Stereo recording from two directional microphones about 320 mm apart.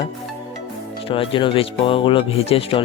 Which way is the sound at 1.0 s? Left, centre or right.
Centre.